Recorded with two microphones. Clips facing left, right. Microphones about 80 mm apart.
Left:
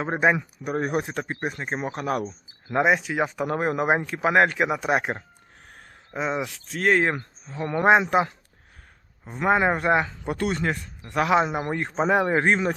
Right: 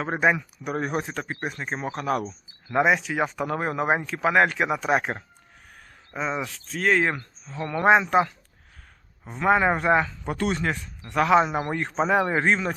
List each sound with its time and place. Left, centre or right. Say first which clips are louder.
0.0 s a man's voice: left 1 dB; centre
1.6 s speech: right 1 dB; centre
3.6 s a man's voice: left 2 dB; centre
4.3 s speech: left 1 dB; left
4.5 s a man's voice: even; centre
9.4 s a man's voice: even; centre
12.5 s speech: left 1 dB; left